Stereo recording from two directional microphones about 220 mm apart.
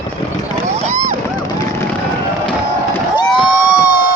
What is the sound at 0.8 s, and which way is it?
Vehicle, 30° right (ahead or behind).